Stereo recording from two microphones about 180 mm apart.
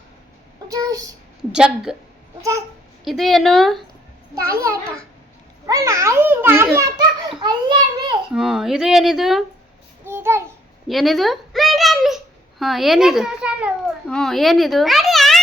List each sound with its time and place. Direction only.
0.7 s a child's voice: 20° right (ahead or behind)
1.4 s speech: 5° right (ahead or behind)
3.0 s speech: centre (ahead or behind)
4.4 s a child's voice: 15° right (ahead or behind)
8.3 s speech: 5° right (ahead or behind)
10.1 s babbling: 15° right (ahead or behind)
10.8 s a child's voice: centre (ahead or behind)